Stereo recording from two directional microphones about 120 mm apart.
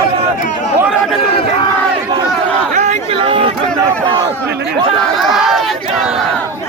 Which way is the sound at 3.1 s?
50° right (ahead or behind).